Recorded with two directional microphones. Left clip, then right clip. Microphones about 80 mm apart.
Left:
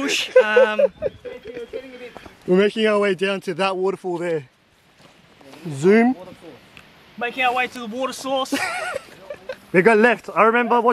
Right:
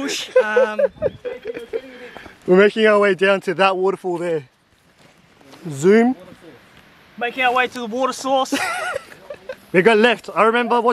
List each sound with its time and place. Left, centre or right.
0.0 s speech: centre
1.2 s speech: right
5.5 s speech: right
7.2 s speech: right
9.8 s speech: centre
10.1 s speech: centre